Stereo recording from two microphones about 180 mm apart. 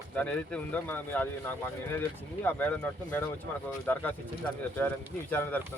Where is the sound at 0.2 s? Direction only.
5° left (ahead or behind).